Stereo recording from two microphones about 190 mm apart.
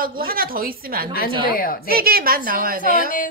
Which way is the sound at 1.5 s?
50° left (ahead or behind).